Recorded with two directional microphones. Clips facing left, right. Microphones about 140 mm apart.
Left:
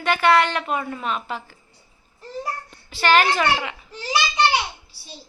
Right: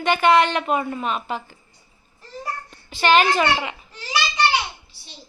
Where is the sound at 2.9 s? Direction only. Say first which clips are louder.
Right 1 dB; 20° right (ahead or behind).